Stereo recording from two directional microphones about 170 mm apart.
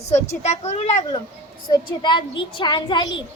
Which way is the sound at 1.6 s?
25° left (ahead or behind).